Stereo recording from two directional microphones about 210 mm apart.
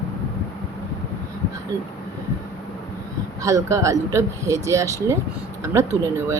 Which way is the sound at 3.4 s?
15° right (ahead or behind).